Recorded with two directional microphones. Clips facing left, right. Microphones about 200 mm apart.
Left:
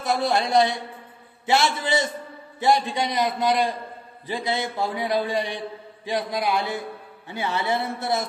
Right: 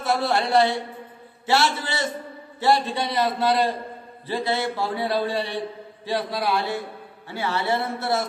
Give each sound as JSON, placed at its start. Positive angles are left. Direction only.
{"t": 0.0, "sound": "a man's voice", "side_deg": 15}